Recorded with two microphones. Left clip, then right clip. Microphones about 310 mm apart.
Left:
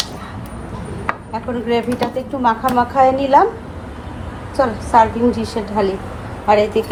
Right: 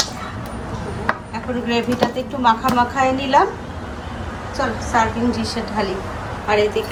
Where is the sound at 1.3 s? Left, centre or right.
Centre.